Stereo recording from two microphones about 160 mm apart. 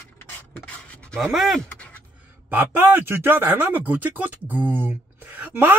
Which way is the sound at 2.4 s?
10° right (ahead or behind).